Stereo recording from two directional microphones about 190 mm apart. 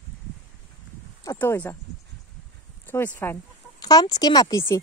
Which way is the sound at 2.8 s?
10° left (ahead or behind).